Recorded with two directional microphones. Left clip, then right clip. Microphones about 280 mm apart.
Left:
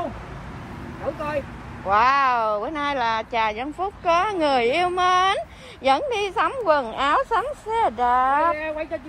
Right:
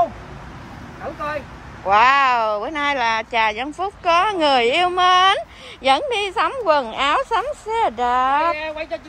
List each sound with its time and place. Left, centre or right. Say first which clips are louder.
1.9 s speech: right 4 dB; centre